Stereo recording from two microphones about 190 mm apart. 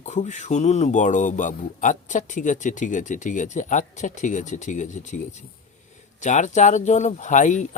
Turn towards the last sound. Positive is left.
turn(degrees=40)  # may be behind; listen again after turning